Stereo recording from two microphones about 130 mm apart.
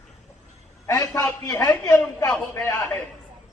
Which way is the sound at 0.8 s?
25° left (ahead or behind).